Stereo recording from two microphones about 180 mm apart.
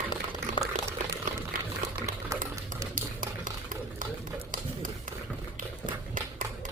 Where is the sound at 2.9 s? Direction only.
50° right (ahead or behind).